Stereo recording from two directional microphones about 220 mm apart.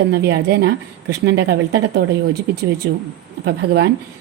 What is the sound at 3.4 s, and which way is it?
Speech, 50° right (ahead or behind).